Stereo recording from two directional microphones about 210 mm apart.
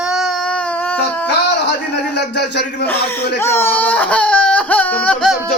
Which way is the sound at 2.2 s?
55° left (ahead or behind).